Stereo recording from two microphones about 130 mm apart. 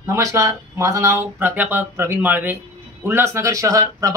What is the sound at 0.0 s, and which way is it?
Speech, 20° right (ahead or behind).